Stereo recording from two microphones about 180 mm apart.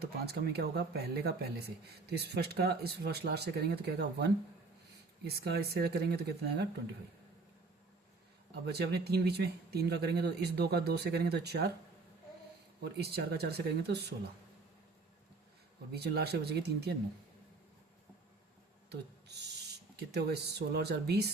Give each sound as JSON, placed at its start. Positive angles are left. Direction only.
{"t": 0.0, "sound": "speech", "side_deg": -60}
{"t": 8.6, "sound": "speech", "side_deg": -65}
{"t": 12.8, "sound": "speech", "side_deg": -65}
{"t": 15.9, "sound": "speech", "side_deg": -65}
{"t": 18.9, "sound": "a sound", "side_deg": -70}
{"t": 20.0, "sound": "speech", "side_deg": -65}